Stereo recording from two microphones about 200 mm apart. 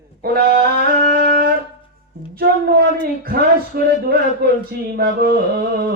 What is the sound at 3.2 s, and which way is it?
Speech, 50° right (ahead or behind).